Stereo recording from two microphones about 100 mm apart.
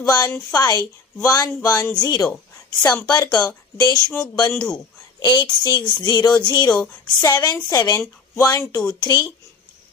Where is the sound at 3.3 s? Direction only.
40° left (ahead or behind).